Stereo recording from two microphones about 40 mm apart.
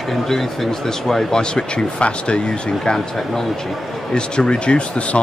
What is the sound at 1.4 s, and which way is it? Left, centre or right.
A man's voice, left.